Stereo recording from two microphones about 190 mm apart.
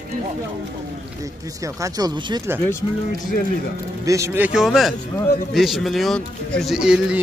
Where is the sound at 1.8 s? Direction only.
20° right (ahead or behind).